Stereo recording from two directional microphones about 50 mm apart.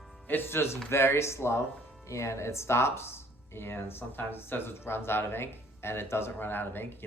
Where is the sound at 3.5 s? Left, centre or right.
Left.